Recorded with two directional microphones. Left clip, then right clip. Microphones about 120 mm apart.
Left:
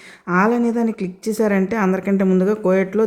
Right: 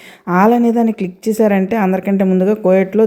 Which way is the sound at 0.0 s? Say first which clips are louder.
Right 5 dB; 25° right (ahead or behind).